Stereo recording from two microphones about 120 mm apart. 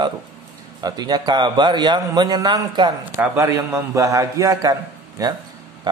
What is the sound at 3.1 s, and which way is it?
A man's voice, 25° right (ahead or behind).